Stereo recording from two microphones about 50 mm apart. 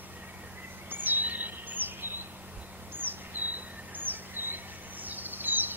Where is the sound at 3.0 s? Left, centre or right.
Right.